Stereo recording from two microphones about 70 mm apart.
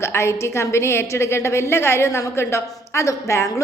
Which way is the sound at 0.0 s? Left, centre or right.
Left.